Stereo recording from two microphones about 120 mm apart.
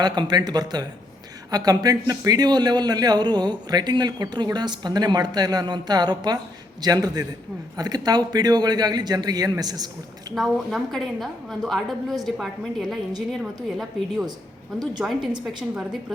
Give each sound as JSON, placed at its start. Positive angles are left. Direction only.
{"t": 0.0, "sound": "a man's voice", "side_deg": -35}
{"t": 10.3, "sound": "a woman's voice", "side_deg": 0}